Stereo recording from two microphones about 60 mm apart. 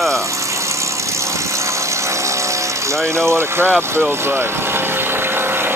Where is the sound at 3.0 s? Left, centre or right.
Centre.